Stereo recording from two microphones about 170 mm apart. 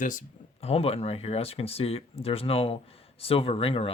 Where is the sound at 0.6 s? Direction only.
35° left (ahead or behind).